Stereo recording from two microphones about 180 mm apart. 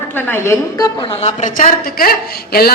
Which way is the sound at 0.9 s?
30° left (ahead or behind).